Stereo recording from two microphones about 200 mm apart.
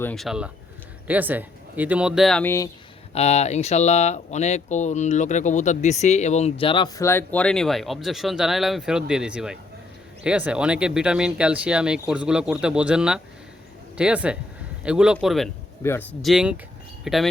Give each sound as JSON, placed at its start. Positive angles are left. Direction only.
{"t": 0.0, "sound": "speech", "side_deg": 5}
{"t": 3.2, "sound": "a man's voice", "side_deg": 30}
{"t": 15.8, "sound": "speech", "side_deg": 10}
{"t": 16.2, "sound": "speech", "side_deg": -5}